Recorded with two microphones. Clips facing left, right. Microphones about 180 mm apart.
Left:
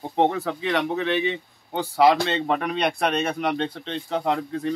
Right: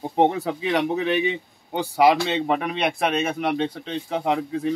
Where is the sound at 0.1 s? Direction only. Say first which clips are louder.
Right 1 dB; 15° right (ahead or behind).